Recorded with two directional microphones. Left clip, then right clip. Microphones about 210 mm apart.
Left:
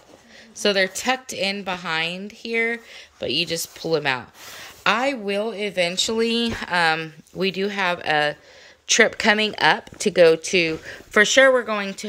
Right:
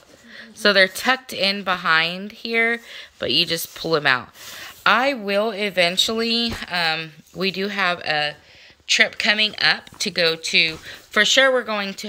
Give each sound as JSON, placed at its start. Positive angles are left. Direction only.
{"t": 0.4, "sound": "a woman's voice", "side_deg": 5}
{"t": 8.8, "sound": "speech", "side_deg": 30}